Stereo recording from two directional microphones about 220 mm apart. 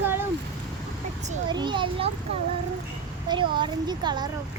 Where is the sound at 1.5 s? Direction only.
20° right (ahead or behind).